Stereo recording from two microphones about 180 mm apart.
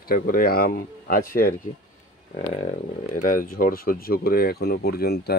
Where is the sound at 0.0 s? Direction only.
55° left (ahead or behind).